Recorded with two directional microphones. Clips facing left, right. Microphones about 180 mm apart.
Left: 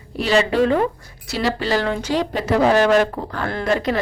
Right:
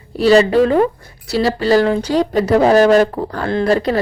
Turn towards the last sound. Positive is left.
turn(degrees=-35)  # may be behind; listen again after turning